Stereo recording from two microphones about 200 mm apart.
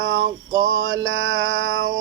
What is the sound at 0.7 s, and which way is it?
Mantra, 85° right.